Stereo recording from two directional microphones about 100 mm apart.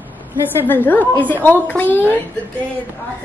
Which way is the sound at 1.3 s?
20° left (ahead or behind).